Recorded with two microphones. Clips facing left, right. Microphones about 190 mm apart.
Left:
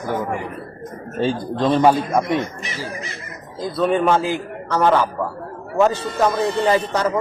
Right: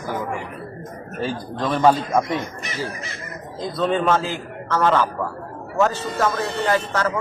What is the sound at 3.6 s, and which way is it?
Speech, 5° left (ahead or behind).